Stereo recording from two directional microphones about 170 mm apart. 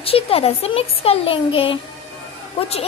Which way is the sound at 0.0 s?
35° left (ahead or behind).